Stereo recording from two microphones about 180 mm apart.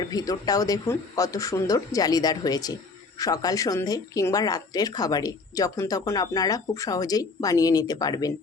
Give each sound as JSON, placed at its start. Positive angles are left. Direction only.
{"t": 0.1, "sound": "speech", "side_deg": 20}